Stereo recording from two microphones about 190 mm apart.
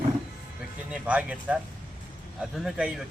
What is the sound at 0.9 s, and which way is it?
Speech, 5° right (ahead or behind).